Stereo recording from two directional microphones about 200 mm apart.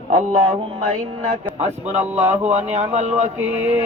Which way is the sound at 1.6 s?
35° right (ahead or behind).